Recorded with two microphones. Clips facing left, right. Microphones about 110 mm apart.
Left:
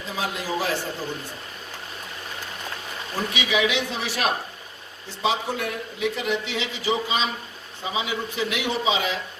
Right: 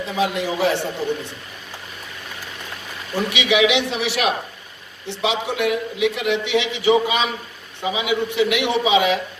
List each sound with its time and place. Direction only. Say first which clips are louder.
0.0 s a man's voice: right 7 dB; 70° right (ahead or behind)
3.2 s a man's voice: right 6 dB; 75° right (ahead or behind)